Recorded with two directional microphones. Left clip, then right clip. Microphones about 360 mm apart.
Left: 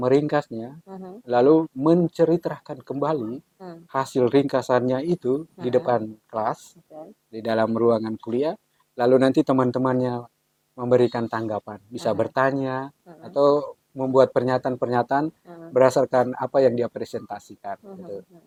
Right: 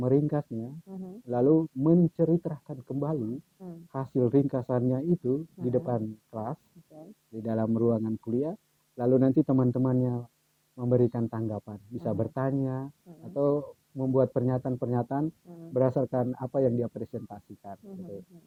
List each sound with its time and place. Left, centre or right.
0.0 s speech: centre